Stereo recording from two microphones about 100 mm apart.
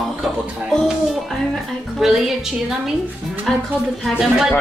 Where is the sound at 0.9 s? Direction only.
Centre (ahead or behind).